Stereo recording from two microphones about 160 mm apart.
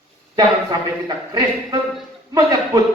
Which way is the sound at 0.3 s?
25° right (ahead or behind).